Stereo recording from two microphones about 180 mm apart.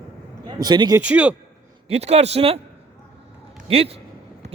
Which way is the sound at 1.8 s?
35° right (ahead or behind).